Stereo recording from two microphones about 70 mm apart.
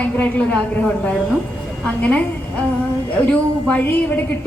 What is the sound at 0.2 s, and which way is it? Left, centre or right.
A woman's voice, centre.